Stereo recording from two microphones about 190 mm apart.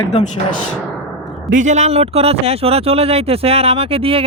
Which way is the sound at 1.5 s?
40° right (ahead or behind).